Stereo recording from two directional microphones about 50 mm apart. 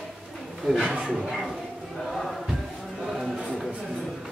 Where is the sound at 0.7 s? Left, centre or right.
Centre.